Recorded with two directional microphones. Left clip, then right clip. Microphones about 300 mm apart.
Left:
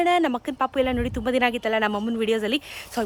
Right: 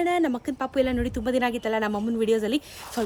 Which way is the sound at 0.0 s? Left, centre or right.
Left.